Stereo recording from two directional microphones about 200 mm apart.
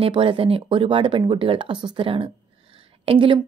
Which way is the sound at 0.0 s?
25° right (ahead or behind).